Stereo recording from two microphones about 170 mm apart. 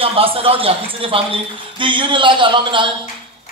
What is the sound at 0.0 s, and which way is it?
A man's voice, 35° right (ahead or behind).